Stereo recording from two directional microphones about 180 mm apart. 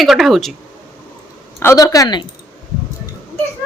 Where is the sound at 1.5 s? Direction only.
15° left (ahead or behind).